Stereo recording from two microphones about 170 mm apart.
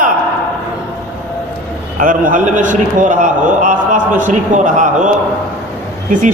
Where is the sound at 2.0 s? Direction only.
50° right (ahead or behind).